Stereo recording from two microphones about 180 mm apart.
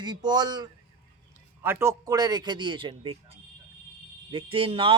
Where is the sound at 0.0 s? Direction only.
25° right (ahead or behind).